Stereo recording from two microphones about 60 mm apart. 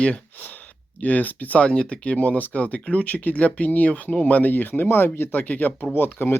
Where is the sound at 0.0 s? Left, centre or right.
Left.